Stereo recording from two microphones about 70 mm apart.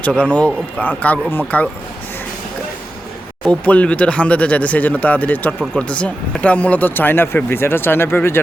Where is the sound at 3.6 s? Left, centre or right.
Centre.